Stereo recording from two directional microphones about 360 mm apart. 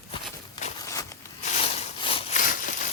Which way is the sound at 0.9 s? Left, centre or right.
Centre.